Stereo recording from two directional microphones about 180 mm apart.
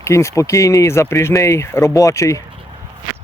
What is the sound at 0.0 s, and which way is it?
Speech, 15° left (ahead or behind).